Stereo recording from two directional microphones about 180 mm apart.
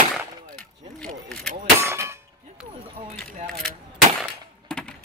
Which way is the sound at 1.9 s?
15° right (ahead or behind).